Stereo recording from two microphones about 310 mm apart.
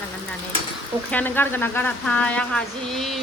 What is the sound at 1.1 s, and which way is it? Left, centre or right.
Speech, centre.